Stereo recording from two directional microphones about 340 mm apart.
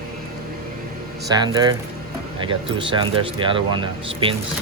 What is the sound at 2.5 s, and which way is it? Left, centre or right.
Speech, centre.